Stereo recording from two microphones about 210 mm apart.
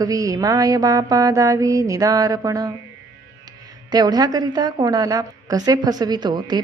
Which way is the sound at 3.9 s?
20° right (ahead or behind).